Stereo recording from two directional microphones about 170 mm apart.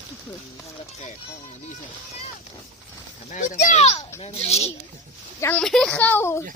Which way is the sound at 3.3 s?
50° left (ahead or behind).